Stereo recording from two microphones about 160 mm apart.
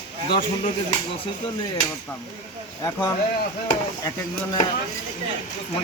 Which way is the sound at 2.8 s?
20° left (ahead or behind).